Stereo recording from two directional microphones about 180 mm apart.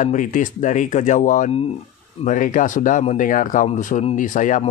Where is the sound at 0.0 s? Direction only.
45° left (ahead or behind).